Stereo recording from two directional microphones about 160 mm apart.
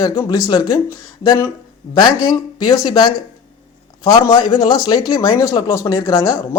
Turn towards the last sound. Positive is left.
turn(degrees=20)  # may be behind; listen again after turning